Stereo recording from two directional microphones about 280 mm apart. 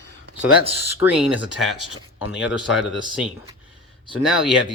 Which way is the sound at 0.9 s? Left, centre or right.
Centre.